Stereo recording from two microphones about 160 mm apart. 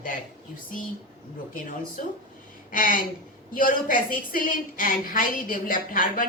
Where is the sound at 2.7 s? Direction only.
60° left (ahead or behind).